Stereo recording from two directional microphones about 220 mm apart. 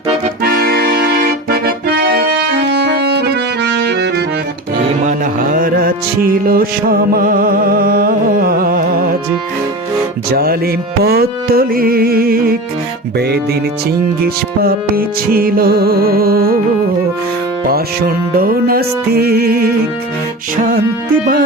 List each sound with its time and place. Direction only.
0.4 s music: 45° right (ahead or behind)
5.0 s music: 35° right (ahead or behind)
10.3 s music: 45° right (ahead or behind)
14.6 s music: 40° right (ahead or behind)
17.7 s music: 45° right (ahead or behind)